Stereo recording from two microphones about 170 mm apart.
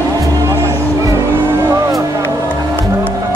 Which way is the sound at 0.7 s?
15° right (ahead or behind).